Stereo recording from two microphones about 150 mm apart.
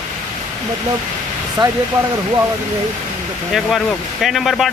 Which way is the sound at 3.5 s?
Centre (ahead or behind).